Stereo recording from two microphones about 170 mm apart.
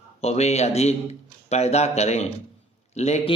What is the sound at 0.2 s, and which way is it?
A man's voice, 40° left (ahead or behind).